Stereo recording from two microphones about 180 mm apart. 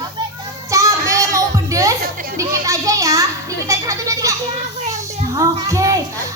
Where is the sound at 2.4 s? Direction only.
20° right (ahead or behind).